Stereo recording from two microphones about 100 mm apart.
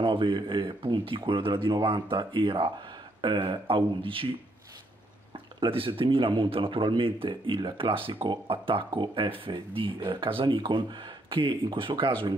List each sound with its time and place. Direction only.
0.0 s speech: 55° right (ahead or behind)
3.2 s speech: 55° right (ahead or behind)
5.3 s speech: 60° right (ahead or behind)